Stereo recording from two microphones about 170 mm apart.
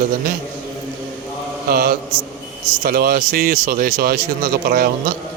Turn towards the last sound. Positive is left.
turn(degrees=-60)  # may be behind; listen again after turning